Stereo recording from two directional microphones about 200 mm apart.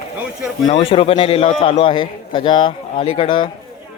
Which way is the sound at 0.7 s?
30° left (ahead or behind).